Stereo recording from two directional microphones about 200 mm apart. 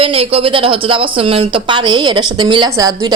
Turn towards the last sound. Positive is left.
turn(degrees=-20)  # may be behind; listen again after turning